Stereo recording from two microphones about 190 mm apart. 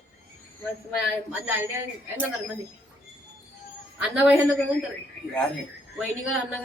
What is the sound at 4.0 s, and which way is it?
Speech, 5° right (ahead or behind).